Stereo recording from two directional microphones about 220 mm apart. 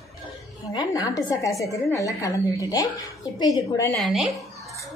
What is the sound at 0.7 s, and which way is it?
A woman's voice, 15° left (ahead or behind).